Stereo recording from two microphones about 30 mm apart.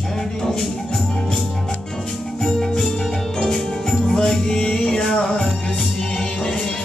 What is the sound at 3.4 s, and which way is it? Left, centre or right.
Music, centre.